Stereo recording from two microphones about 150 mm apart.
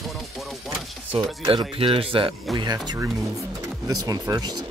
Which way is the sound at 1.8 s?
40° right (ahead or behind).